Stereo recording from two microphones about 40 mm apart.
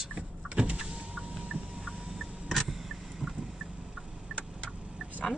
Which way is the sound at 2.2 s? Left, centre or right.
Centre.